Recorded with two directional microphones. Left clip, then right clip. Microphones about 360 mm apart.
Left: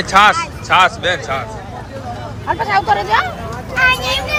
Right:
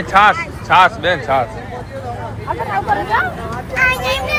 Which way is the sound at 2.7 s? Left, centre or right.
Left.